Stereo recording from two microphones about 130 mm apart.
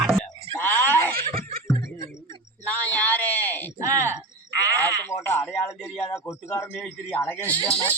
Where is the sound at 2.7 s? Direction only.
10° left (ahead or behind).